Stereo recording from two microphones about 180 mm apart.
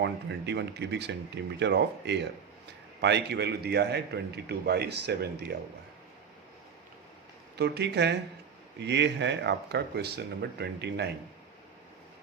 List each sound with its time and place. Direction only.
0.0 s a man's voice: 70° right (ahead or behind)
7.5 s a man's voice: 70° right (ahead or behind)